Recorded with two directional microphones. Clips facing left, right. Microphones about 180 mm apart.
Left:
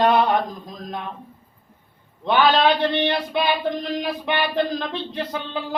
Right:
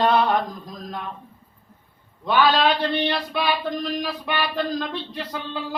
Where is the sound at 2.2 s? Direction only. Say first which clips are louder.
Left 1 dB; 20° left (ahead or behind).